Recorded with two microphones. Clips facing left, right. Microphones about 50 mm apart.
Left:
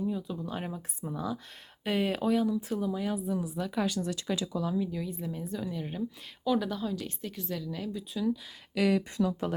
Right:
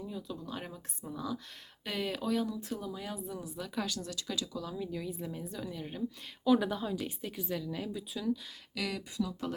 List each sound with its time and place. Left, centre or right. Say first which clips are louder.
0.0 s speech: left 7 dB; centre
2.3 s speech: left 5 dB; centre
3.8 s speech: left 7 dB; left
4.8 s a woman's voice: left 4 dB; centre
6.4 s a woman's voice: right 1 dB; centre
8.7 s speech: left 11 dB; left